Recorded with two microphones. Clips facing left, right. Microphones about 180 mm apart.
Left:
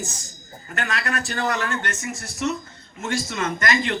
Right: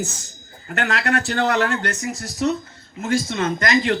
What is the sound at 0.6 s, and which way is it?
A man's voice, 65° right (ahead or behind).